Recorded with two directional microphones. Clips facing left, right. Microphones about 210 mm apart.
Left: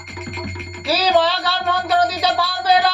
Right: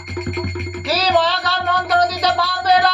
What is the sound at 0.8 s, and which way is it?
Music, 10° left (ahead or behind).